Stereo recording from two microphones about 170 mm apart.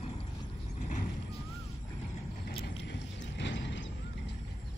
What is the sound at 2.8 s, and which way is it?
Vehicle, 90° left.